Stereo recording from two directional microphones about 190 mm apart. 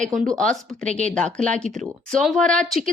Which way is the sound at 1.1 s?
5° left (ahead or behind).